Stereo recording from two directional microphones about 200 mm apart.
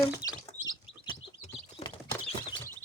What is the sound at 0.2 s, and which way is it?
Bird, 15° left (ahead or behind).